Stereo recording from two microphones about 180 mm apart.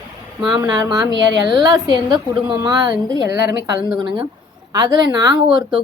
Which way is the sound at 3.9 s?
25° right (ahead or behind).